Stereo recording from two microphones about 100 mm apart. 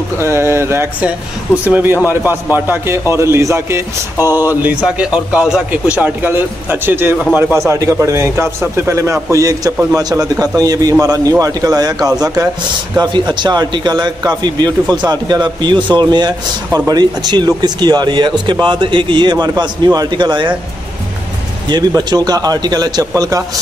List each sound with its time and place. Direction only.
0.2 s a man's voice: 25° right (ahead or behind); by 16.3 s 45° right (ahead or behind)
16.7 s a man's voice: 30° right (ahead or behind)
17.2 s speech: 45° right (ahead or behind)
21.6 s a man's voice: 45° right (ahead or behind)